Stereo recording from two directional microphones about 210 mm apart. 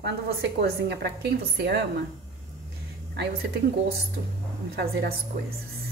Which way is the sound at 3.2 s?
50° right (ahead or behind).